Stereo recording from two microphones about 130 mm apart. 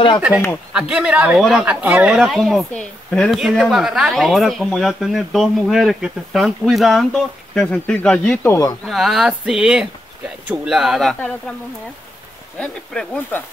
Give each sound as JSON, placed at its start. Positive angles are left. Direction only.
{"t": 0.7, "sound": "speech", "side_deg": -10}
{"t": 8.4, "sound": "speech", "side_deg": 25}
{"t": 8.8, "sound": "speech", "side_deg": 0}
{"t": 12.5, "sound": "speech", "side_deg": 10}